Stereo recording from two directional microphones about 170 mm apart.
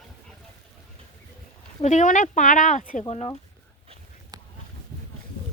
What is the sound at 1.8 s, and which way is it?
Speech, 45° left (ahead or behind).